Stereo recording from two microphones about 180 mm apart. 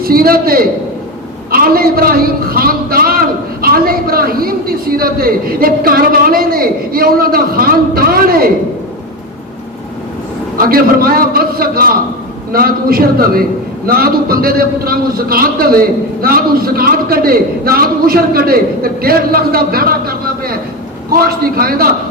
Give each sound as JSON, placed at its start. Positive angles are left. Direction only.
{"t": 0.0, "sound": "a man's voice", "side_deg": -55}
{"t": 10.6, "sound": "a man's voice", "side_deg": -55}